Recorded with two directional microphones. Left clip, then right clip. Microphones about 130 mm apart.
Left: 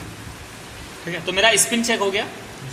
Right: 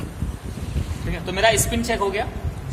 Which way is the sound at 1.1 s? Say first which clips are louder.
Left 2 dB; 25° left (ahead or behind).